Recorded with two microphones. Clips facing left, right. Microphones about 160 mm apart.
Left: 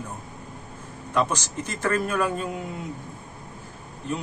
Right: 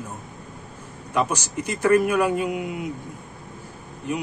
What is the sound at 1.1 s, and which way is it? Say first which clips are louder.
A man's voice: right 1 dB; 10° right (ahead or behind).